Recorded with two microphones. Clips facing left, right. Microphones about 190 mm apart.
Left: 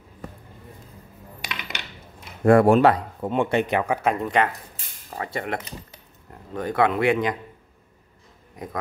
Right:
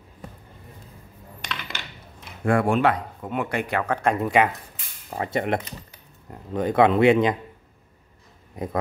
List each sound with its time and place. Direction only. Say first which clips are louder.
1.4 s coin: even; 10° left (ahead or behind)
2.4 s speech: left 5 dB; 40° left (ahead or behind); by 4.5 s 5° right (ahead or behind)
5.1 s speech: right 4 dB; 25° right (ahead or behind)